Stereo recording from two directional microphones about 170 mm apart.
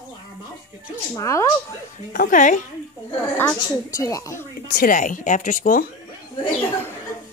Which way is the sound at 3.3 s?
20° left (ahead or behind).